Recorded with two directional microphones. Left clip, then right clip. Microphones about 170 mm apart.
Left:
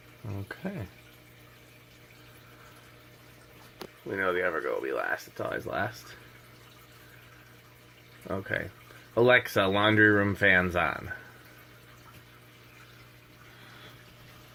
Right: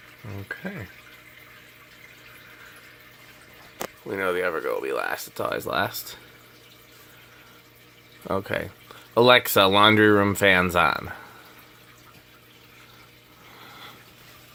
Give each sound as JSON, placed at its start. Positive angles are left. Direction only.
{"t": 0.3, "sound": "speech", "side_deg": 0}
{"t": 4.0, "sound": "speech", "side_deg": -25}
{"t": 8.3, "sound": "speech", "side_deg": -35}